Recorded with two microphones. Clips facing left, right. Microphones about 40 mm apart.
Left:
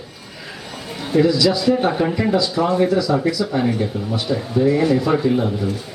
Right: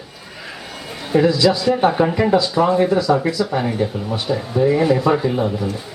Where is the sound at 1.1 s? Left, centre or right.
Right.